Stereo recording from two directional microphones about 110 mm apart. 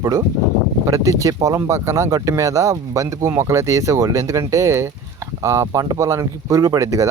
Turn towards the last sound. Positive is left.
turn(degrees=-30)  # may be behind; listen again after turning